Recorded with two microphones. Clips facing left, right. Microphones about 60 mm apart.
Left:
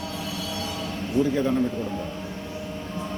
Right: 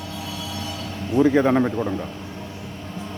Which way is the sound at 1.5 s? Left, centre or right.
Right.